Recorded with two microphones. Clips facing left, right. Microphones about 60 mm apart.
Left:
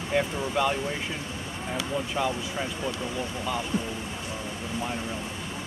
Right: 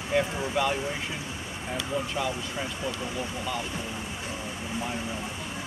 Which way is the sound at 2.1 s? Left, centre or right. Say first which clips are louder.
Left 2 dB; centre.